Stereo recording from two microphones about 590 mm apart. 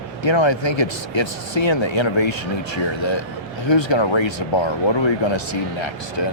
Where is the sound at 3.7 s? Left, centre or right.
Left.